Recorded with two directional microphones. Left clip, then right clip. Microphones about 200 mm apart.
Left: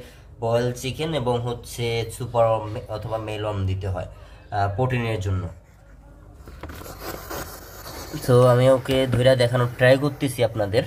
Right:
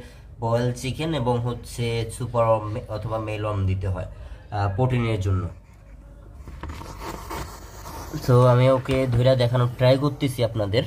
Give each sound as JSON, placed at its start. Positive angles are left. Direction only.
{"t": 0.4, "sound": "speech", "side_deg": 0}
{"t": 6.9, "sound": "a sound", "side_deg": 0}
{"t": 8.3, "sound": "speech", "side_deg": 5}